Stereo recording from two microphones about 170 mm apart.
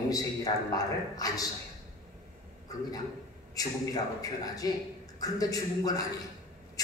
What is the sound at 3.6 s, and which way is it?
A man's voice, 20° left (ahead or behind).